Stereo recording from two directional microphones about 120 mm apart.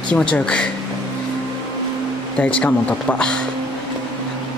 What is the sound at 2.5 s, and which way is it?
Speech, 10° left (ahead or behind).